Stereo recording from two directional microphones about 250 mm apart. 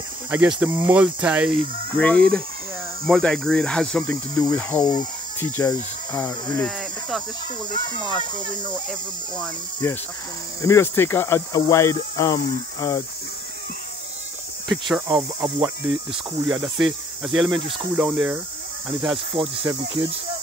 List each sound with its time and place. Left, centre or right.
0.3 s speech: centre
4.5 s cricket: centre
10.6 s speech: centre
14.7 s speech: centre
15.0 s speech: centre
16.7 s speech: centre
19.3 s speech: centre